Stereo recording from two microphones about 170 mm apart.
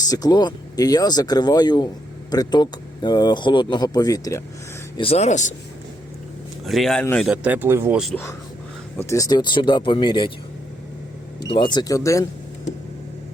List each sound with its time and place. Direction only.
0.0 s speech: 25° left (ahead or behind)
4.9 s speech: 35° left (ahead or behind)
6.7 s speech: centre (ahead or behind)
7.3 s speech: 10° right (ahead or behind)
8.1 s speech: 15° left (ahead or behind)
11.4 s speech: 25° left (ahead or behind)